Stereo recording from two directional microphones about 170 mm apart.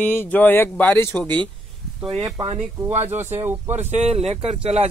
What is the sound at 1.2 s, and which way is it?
Speech, 25° right (ahead or behind).